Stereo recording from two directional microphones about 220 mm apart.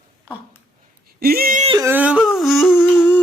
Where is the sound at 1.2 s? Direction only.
45° right (ahead or behind).